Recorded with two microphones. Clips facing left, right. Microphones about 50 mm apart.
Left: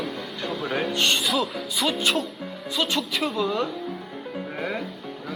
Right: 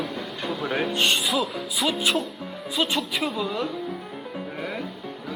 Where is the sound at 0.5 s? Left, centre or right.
Centre.